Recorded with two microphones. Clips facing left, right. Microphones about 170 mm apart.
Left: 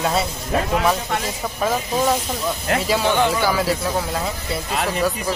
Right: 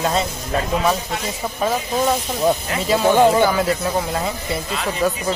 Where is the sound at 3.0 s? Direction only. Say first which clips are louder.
Right 7 dB; 35° right (ahead or behind).